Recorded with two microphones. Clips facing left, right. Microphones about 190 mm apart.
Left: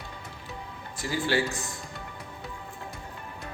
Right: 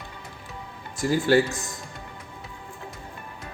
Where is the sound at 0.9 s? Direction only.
45° right (ahead or behind).